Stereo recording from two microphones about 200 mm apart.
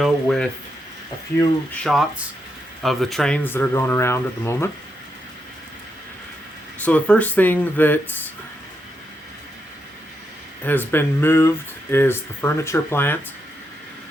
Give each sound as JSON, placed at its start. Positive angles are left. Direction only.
{"t": 0.0, "sound": "speech", "side_deg": 0}
{"t": 6.8, "sound": "speech", "side_deg": 5}
{"t": 10.6, "sound": "speech", "side_deg": 10}